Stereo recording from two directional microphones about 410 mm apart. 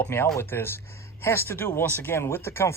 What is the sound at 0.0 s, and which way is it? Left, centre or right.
Speech, centre.